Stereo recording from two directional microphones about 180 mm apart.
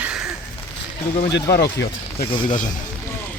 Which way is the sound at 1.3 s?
65° left (ahead or behind).